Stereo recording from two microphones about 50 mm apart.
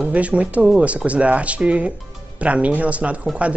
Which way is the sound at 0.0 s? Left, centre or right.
Right.